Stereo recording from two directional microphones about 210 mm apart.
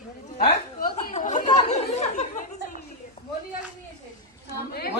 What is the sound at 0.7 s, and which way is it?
Chatter, 45° left (ahead or behind).